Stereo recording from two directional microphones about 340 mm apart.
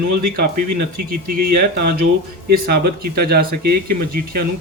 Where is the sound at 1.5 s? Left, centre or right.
Right.